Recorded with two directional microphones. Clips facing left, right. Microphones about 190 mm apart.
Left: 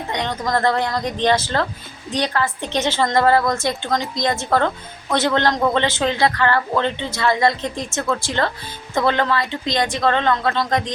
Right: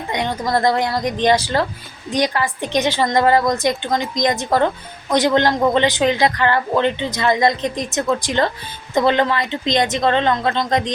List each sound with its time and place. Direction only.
0.1 s a woman's voice: 10° right (ahead or behind)